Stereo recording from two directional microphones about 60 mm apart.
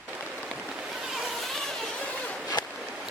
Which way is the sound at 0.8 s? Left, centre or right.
Centre.